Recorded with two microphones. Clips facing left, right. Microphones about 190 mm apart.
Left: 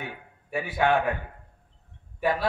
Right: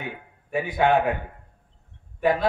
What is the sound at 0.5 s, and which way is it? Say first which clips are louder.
Speech: right 3 dB; 20° right (ahead or behind).